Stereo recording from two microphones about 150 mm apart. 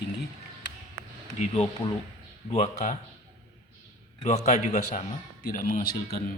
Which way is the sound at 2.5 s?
50° left (ahead or behind).